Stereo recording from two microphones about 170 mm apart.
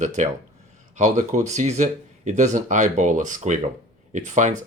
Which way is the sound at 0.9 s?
45° right (ahead or behind).